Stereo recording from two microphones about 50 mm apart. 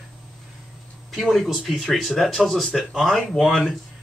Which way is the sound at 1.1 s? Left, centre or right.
Centre.